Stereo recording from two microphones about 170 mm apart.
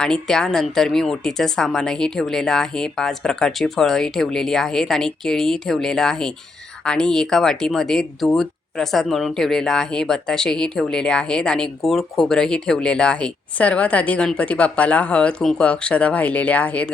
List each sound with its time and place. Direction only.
0.0 s speech: 5° left (ahead or behind)